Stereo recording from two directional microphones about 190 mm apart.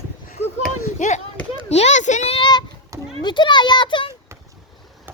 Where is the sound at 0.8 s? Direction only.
40° left (ahead or behind).